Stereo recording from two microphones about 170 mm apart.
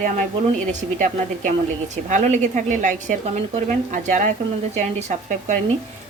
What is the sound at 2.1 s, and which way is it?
A woman's voice, 45° right (ahead or behind).